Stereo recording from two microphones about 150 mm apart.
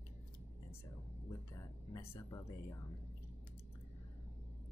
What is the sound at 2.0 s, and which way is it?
Speech, 20° left (ahead or behind).